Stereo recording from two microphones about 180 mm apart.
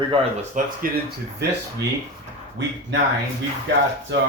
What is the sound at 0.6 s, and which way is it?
Speech, 45° right (ahead or behind).